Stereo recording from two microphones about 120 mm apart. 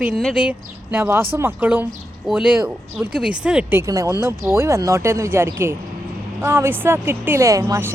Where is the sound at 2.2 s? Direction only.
Centre (ahead or behind).